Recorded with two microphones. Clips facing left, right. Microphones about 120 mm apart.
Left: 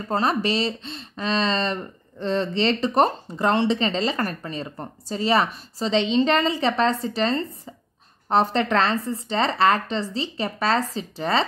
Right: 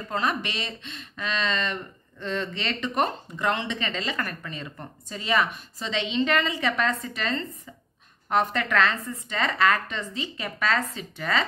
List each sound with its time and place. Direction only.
0.1 s speech: 35° left (ahead or behind)